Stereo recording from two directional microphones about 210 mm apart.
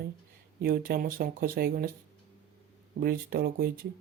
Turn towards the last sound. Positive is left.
turn(degrees=-45)  # may be behind; listen again after turning